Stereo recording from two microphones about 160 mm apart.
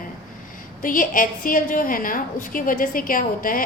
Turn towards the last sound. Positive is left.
turn(degrees=60)  # may be behind; listen again after turning